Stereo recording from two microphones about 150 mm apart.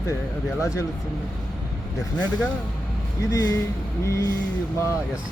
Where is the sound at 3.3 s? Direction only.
20° left (ahead or behind).